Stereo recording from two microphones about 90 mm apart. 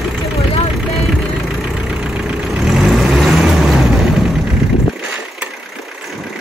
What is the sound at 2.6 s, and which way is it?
Vehicle, 5° right (ahead or behind).